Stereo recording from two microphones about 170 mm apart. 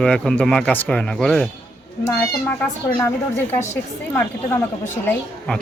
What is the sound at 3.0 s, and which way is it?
Speech, 15° left (ahead or behind).